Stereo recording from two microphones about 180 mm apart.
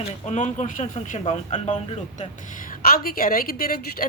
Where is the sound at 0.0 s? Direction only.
35° left (ahead or behind).